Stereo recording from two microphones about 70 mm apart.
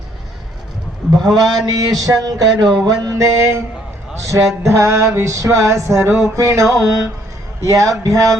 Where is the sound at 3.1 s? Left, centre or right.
Right.